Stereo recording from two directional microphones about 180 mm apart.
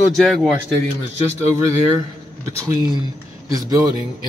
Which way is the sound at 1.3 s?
15° right (ahead or behind).